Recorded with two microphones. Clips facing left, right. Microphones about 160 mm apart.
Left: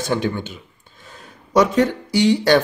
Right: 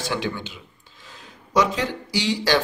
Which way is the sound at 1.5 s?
50° left (ahead or behind).